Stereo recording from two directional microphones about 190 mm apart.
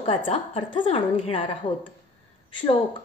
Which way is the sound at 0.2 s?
30° left (ahead or behind).